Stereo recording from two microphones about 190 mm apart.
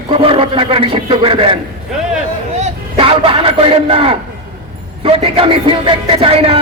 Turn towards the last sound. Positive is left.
turn(degrees=-30)  # may be behind; listen again after turning